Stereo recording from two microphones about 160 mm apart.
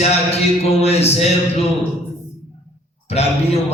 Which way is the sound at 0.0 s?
40° left (ahead or behind).